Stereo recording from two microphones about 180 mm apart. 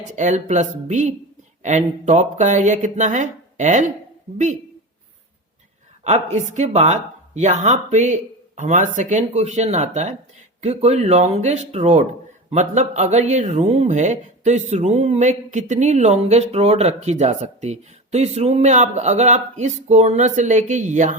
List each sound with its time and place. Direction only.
0.2 s speech: 40° right (ahead or behind)
6.1 s speech: 40° right (ahead or behind)